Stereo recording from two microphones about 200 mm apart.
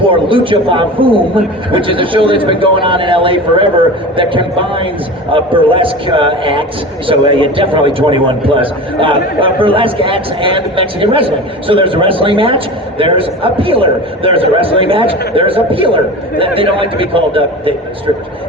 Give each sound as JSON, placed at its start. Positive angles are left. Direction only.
{"t": 0.0, "sound": "a man's voice", "side_deg": -25}